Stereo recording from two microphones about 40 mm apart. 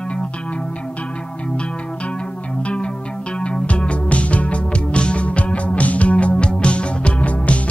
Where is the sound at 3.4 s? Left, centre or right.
Left.